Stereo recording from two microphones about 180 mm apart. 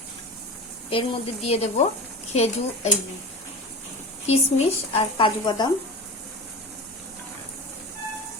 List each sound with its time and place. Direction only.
0.9 s speech: 35° left (ahead or behind)
4.3 s a woman's voice: 35° left (ahead or behind)